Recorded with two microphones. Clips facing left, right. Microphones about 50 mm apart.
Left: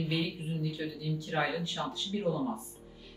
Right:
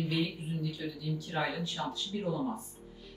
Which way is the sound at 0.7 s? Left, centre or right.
Left.